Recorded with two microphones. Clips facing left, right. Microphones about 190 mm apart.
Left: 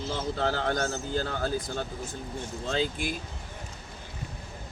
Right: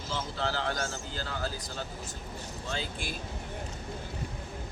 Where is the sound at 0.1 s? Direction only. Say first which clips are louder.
Left 4 dB; 50° left (ahead or behind).